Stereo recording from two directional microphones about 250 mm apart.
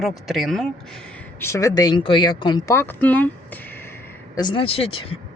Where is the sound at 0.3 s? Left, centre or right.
Centre.